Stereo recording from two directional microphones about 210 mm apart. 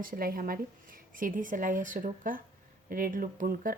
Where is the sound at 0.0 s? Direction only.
45° right (ahead or behind).